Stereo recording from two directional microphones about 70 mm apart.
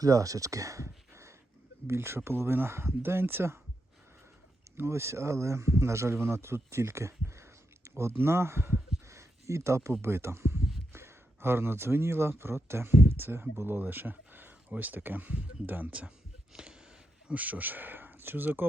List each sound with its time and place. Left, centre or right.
0.0 s speech: right
4.8 s speech: right; by 16.1 s centre
16.5 s a sound: centre
17.2 s speech: right